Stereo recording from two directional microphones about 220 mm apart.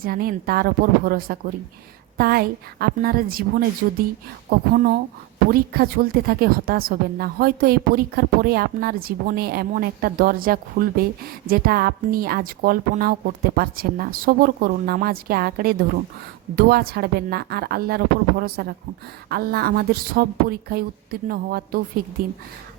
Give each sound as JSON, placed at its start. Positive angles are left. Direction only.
{"t": 0.0, "sound": "a woman's voice", "side_deg": -40}